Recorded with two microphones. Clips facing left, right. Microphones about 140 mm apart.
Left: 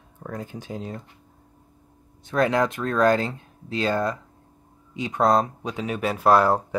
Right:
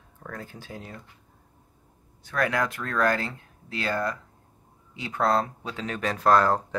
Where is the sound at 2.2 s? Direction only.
25° left (ahead or behind).